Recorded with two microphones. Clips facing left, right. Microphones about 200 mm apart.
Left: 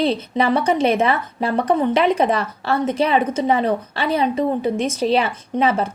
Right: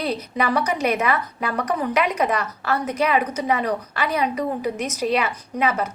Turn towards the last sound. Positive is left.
turn(degrees=30)  # may be behind; listen again after turning